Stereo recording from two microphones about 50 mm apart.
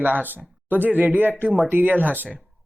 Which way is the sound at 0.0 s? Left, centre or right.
Right.